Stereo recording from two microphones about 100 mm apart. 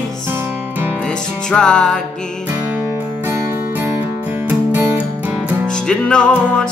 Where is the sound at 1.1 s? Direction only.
10° left (ahead or behind).